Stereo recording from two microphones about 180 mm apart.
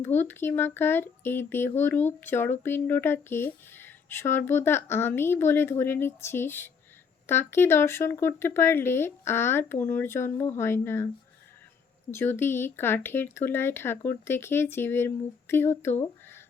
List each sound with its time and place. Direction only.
0.0 s speech: 10° left (ahead or behind)
12.1 s speech: 10° left (ahead or behind)